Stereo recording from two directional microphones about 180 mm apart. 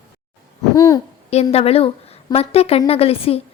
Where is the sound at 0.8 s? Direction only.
20° left (ahead or behind).